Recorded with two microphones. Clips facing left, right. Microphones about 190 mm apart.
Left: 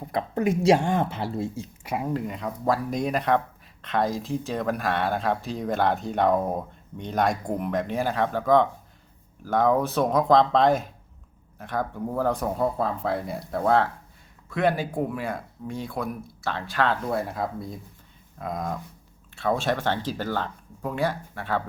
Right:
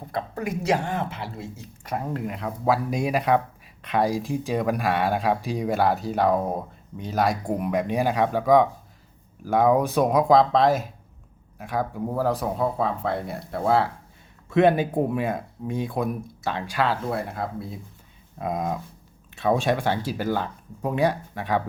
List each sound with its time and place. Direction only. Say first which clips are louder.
0.1 s speech: left 4 dB; 25° left (ahead or behind)
1.8 s speech: left 1 dB; 10° left (ahead or behind)
2.2 s speech: right 2 dB; 5° right (ahead or behind)
14.5 s speech: right 5 dB; 20° right (ahead or behind); by 17.7 s centre (ahead or behind)
18.3 s speech: right 3 dB; 20° right (ahead or behind)